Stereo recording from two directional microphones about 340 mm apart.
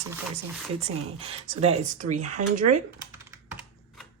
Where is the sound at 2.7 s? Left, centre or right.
Right.